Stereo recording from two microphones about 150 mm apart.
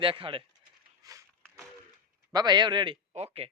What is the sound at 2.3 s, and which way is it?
Speech, 25° right (ahead or behind).